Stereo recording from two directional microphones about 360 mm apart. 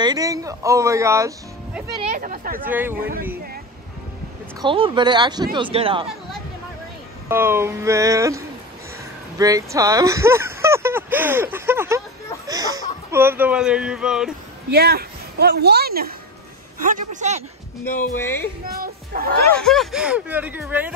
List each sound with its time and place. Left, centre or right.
0.0 s speech: centre
2.0 s speech: centre
2.6 s speech: centre
4.6 s speech: centre
7.2 s speech: centre
14.7 s a woman's voice: right
18.7 s speech: right
19.6 s speech: centre